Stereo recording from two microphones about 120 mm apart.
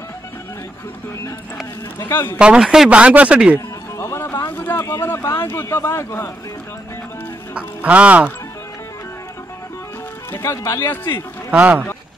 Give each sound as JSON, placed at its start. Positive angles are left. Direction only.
{"t": 2.0, "sound": "speech", "side_deg": 20}
{"t": 2.3, "sound": "speech", "side_deg": -10}
{"t": 3.5, "sound": "speech", "side_deg": 20}
{"t": 7.5, "sound": "speech", "side_deg": -10}
{"t": 10.3, "sound": "speech", "side_deg": 25}
{"t": 11.5, "sound": "speech", "side_deg": -10}